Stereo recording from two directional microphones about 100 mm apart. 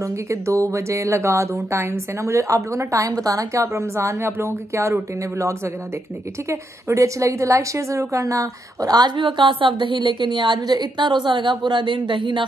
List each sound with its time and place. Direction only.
0.0 s a woman's voice: 30° right (ahead or behind); by 12.4 s 55° right (ahead or behind)